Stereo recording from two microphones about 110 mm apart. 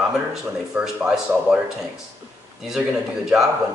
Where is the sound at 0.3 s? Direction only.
5° right (ahead or behind).